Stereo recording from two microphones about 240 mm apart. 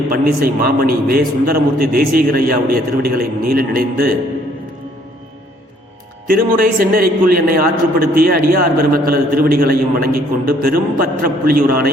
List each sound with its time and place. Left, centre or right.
0.1 s a man's voice: right
6.2 s a man's voice: right